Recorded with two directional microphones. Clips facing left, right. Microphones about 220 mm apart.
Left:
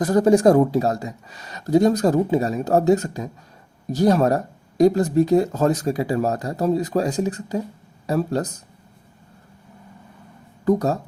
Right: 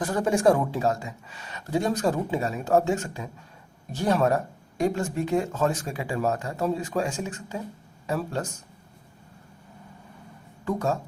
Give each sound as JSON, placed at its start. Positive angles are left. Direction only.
{"t": 0.0, "sound": "speech", "side_deg": 40}
{"t": 10.7, "sound": "speech", "side_deg": 40}